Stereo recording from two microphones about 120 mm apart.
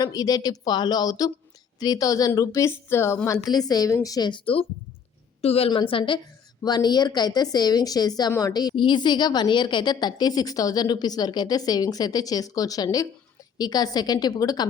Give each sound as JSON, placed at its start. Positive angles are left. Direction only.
{"t": 0.0, "sound": "a woman's voice", "side_deg": 30}
{"t": 3.5, "sound": "a woman's voice", "side_deg": 35}
{"t": 5.4, "sound": "a woman's voice", "side_deg": 55}